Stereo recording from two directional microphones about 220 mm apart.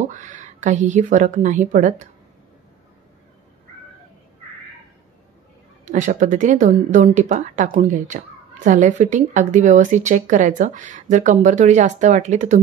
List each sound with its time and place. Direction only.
0.1 s speech: 35° right (ahead or behind)
5.9 s speech: 35° right (ahead or behind)